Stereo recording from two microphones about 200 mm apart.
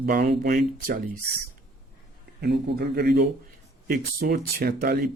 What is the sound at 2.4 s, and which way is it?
Speech, 55° right (ahead or behind).